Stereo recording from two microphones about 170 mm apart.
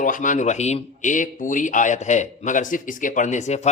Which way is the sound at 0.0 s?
50° left (ahead or behind).